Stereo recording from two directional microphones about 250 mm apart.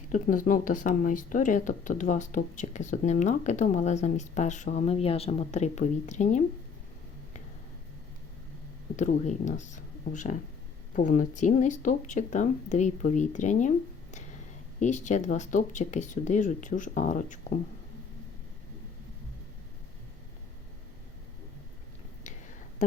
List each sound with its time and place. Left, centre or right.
0.1 s speech: left
9.0 s speech: left